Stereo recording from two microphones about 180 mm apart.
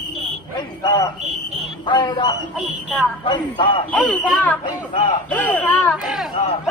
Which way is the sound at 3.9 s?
10° left (ahead or behind).